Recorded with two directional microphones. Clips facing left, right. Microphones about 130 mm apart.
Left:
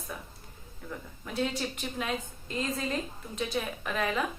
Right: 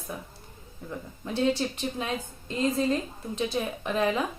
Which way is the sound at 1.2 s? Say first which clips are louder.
Right 6 dB; 30° right (ahead or behind).